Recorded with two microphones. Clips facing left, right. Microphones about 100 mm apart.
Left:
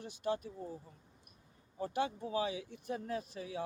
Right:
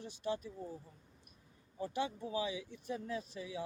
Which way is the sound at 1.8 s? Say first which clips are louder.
Left 2 dB; 50° left (ahead or behind).